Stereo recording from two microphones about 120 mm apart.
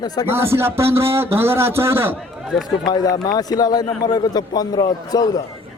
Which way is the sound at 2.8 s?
35° left (ahead or behind).